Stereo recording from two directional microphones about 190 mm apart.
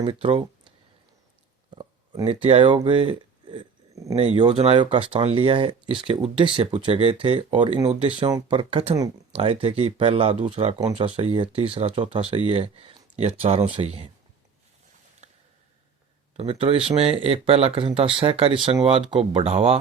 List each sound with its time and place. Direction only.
0.0 s speech: 30° right (ahead or behind)
1.7 s speech: 25° right (ahead or behind)
4.1 s speech: 35° right (ahead or behind)
15.2 s a sound: 35° right (ahead or behind)
16.4 s speech: 30° right (ahead or behind)